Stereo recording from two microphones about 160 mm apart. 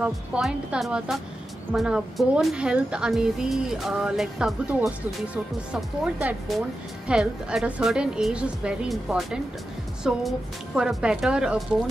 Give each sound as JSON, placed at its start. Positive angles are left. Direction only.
{"t": 0.0, "sound": "a woman's voice", "side_deg": -5}